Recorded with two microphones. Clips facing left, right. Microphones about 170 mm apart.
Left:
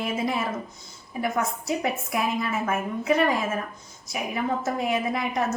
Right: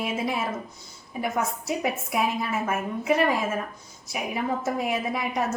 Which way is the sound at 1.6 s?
5° right (ahead or behind).